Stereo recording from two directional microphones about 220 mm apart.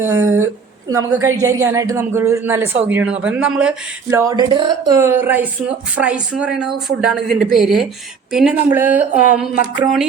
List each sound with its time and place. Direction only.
0.2 s speech: 70° right (ahead or behind)
1.2 s a woman's voice: 15° right (ahead or behind)